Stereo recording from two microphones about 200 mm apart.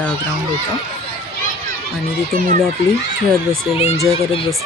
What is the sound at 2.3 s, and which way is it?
Speech, 45° right (ahead or behind).